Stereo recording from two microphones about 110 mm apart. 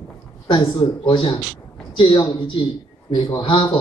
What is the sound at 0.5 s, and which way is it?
A man's voice, 45° left (ahead or behind).